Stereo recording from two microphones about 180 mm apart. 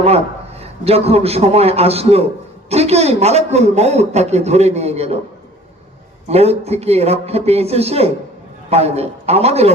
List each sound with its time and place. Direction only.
0.6 s a man's voice: 35° right (ahead or behind)
6.2 s a man's voice: 35° right (ahead or behind)